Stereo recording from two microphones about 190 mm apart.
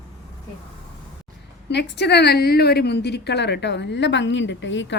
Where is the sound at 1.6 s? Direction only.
65° left (ahead or behind).